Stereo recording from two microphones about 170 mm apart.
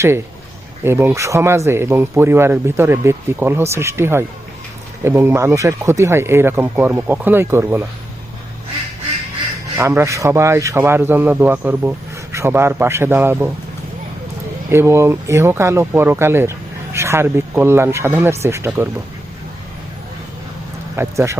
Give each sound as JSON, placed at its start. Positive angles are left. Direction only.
{"t": 0.9, "sound": "speech", "side_deg": -15}
{"t": 9.7, "sound": "speech", "side_deg": -15}
{"t": 14.7, "sound": "speech", "side_deg": -15}
{"t": 20.9, "sound": "speech", "side_deg": -15}